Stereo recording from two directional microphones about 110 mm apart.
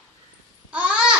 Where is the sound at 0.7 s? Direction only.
10° right (ahead or behind).